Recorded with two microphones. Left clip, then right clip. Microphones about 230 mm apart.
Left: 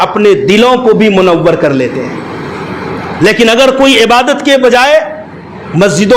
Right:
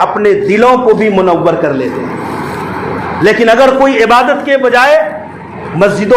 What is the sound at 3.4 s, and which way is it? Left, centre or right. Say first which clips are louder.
Speech: even; left.